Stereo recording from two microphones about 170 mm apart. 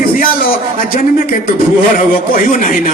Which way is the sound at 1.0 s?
55° left (ahead or behind).